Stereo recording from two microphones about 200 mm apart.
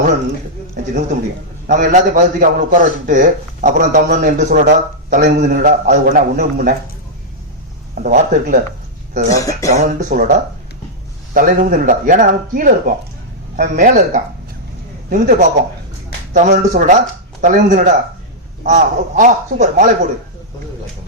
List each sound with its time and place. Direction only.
0.8 s a sound: 45° right (ahead or behind)
1.6 s a man's voice: 40° right (ahead or behind)
8.0 s speech: 40° right (ahead or behind)
9.3 s speech: 15° left (ahead or behind)
9.7 s a man's voice: 40° right (ahead or behind)
11.3 s a man's voice: 45° right (ahead or behind)